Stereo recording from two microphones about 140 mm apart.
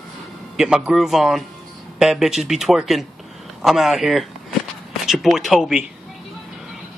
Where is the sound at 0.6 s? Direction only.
5° right (ahead or behind).